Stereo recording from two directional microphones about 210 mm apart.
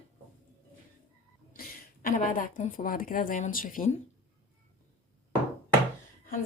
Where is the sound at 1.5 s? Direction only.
45° left (ahead or behind).